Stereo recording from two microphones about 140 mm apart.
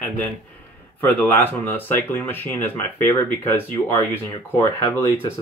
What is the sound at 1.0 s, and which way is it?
Speech, 15° left (ahead or behind).